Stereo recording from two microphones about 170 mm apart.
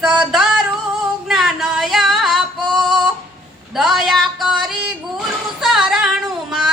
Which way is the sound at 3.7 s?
Centre (ahead or behind).